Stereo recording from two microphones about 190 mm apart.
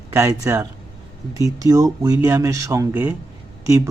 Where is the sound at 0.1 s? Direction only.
15° right (ahead or behind).